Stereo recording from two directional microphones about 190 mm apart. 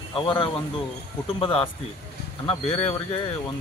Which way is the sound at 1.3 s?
25° left (ahead or behind).